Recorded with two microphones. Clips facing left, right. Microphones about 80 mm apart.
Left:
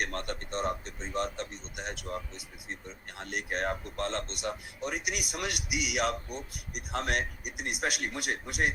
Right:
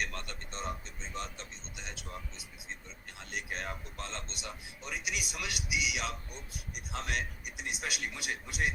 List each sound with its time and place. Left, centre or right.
0.0 s speech: left